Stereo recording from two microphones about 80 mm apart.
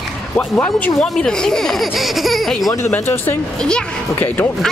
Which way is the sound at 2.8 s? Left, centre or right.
Left.